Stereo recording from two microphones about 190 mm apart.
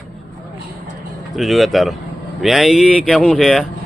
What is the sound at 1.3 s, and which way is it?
Speech, centre (ahead or behind).